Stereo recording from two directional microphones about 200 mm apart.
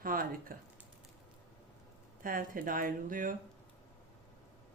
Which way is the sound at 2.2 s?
45° right (ahead or behind).